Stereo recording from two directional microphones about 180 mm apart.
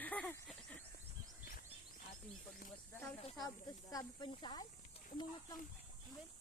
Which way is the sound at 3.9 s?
20° left (ahead or behind).